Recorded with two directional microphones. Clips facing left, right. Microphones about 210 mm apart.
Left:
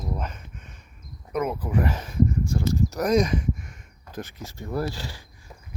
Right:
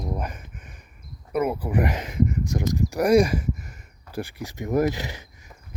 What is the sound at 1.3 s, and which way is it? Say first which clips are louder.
Speech: right 2 dB; 10° right (ahead or behind).